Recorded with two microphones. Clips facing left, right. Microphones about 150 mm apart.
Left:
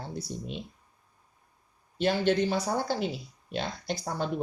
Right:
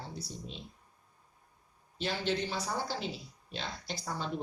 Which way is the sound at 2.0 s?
55° left (ahead or behind).